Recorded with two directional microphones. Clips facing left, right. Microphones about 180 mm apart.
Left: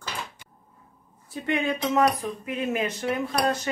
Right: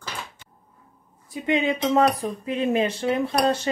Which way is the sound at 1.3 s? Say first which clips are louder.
Right 3 dB; 15° right (ahead or behind).